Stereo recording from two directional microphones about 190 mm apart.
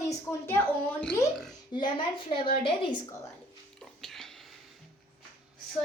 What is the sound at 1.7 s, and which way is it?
A woman's voice, 25° left (ahead or behind).